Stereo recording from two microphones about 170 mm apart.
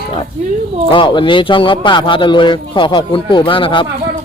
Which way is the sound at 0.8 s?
30° left (ahead or behind).